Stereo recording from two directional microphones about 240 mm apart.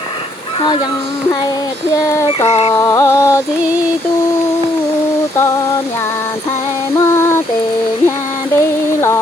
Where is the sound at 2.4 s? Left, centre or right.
Left.